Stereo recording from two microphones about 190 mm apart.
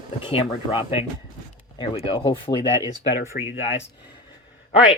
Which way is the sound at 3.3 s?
55° left (ahead or behind).